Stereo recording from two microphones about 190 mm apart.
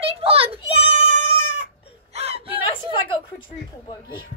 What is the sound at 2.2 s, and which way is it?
Whimper, 30° right (ahead or behind).